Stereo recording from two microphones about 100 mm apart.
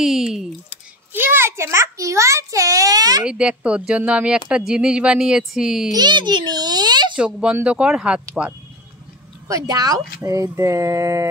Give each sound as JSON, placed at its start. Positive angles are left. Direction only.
{"t": 0.0, "sound": "speech", "side_deg": -5}
{"t": 1.1, "sound": "a child's voice", "side_deg": -20}
{"t": 3.3, "sound": "a woman's voice", "side_deg": -10}
{"t": 5.9, "sound": "a child's voice", "side_deg": -50}
{"t": 7.2, "sound": "a woman's voice", "side_deg": -10}
{"t": 9.5, "sound": "a child's voice", "side_deg": -35}